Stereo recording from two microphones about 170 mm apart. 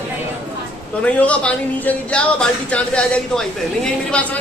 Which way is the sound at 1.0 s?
10° left (ahead or behind).